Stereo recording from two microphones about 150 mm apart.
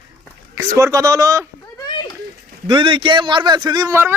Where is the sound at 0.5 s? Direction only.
20° right (ahead or behind).